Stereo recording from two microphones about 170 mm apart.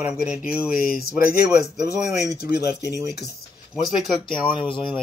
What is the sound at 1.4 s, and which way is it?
Speech, 20° right (ahead or behind).